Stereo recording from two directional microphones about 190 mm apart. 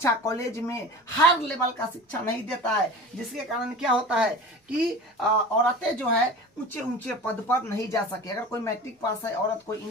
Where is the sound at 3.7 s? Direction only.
5° right (ahead or behind); by 8.7 s 15° left (ahead or behind).